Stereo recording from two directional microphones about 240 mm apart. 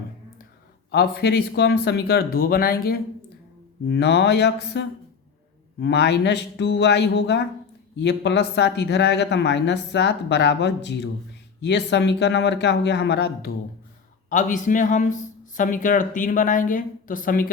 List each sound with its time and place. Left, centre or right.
0.9 s a man's voice: left
14.3 s a man's voice: left